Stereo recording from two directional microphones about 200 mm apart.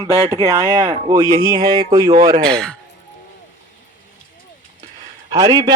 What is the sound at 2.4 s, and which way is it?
Speech, 5° left (ahead or behind).